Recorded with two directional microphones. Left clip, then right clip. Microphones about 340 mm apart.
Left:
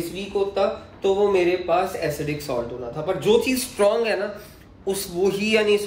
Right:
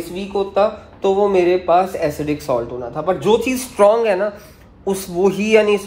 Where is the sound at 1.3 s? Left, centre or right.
Centre.